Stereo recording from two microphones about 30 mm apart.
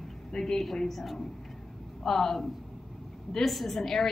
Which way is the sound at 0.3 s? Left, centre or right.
Centre.